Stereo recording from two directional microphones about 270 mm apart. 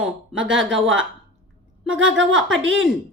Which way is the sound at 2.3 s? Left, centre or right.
Right.